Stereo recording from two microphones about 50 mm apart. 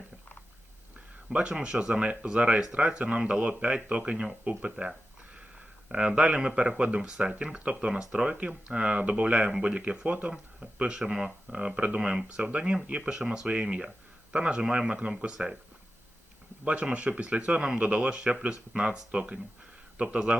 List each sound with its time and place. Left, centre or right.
1.3 s speech: centre
5.9 s speech: centre
11.7 s speech: right
11.9 s speech: centre
16.6 s speech: right